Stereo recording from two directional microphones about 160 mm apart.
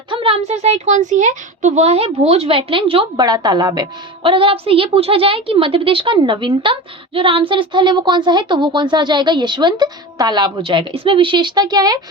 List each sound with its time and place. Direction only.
0.1 s a woman's voice: 30° right (ahead or behind)
3.2 s a woman's voice: 25° right (ahead or behind)